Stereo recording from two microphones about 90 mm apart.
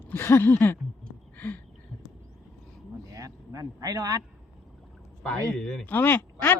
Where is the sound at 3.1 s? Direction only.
40° right (ahead or behind).